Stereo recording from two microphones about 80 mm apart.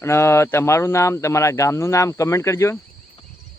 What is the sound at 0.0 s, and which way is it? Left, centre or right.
Speech, left.